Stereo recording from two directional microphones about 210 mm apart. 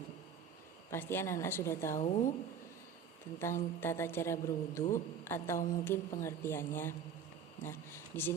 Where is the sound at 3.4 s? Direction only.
10° left (ahead or behind).